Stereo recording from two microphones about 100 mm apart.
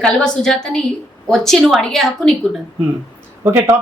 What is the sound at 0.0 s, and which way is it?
A woman's voice, 5° left (ahead or behind).